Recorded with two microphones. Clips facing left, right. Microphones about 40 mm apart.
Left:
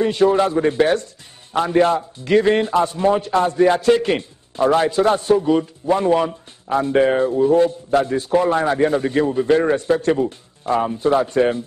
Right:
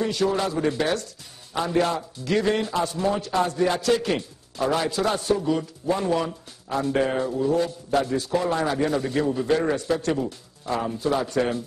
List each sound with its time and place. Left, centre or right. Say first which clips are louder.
0.0 s a man's voice: left 8 dB; left